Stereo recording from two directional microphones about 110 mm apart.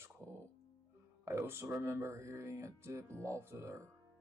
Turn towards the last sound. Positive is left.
turn(degrees=-25)  # may be behind; listen again after turning